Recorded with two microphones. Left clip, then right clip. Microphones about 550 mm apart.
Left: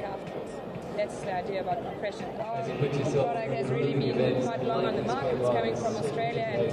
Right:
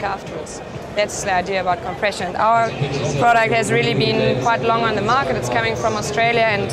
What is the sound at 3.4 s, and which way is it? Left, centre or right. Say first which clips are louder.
A man's voice: right 13 dB; right.